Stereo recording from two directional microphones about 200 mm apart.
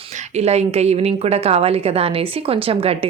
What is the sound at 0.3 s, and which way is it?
A woman's voice, 30° right (ahead or behind).